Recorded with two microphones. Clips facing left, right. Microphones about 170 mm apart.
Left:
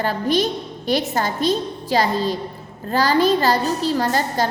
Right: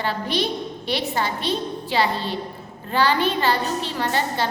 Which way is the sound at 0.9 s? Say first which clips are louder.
Left 4 dB; 45° left (ahead or behind).